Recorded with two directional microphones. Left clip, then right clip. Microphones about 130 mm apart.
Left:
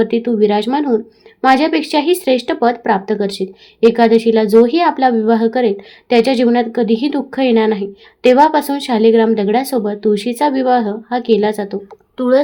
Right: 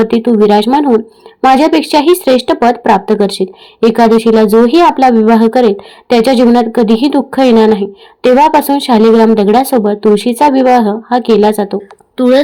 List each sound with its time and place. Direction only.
0.0 s a woman's voice: 30° right (ahead or behind)
12.1 s speech: 45° right (ahead or behind)